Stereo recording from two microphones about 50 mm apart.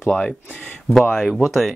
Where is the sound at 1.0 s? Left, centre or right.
Centre.